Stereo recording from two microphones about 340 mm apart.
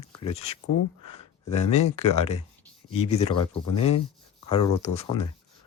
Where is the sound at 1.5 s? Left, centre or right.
Centre.